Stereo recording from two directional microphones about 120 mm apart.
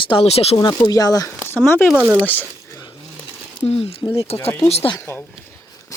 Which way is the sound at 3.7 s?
55° left (ahead or behind).